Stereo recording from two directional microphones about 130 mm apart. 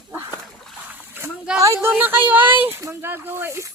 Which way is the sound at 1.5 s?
25° right (ahead or behind).